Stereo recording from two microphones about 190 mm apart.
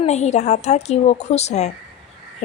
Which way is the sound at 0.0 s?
35° left (ahead or behind).